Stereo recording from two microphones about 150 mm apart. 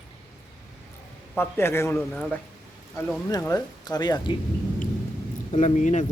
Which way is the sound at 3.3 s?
25° left (ahead or behind).